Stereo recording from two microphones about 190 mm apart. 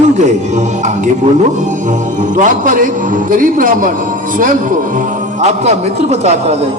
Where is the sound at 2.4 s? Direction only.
45° right (ahead or behind).